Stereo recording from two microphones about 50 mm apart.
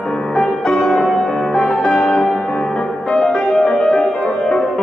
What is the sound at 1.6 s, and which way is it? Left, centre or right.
Music, left.